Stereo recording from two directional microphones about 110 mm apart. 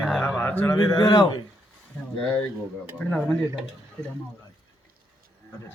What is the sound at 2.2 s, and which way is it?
Speech, 10° left (ahead or behind).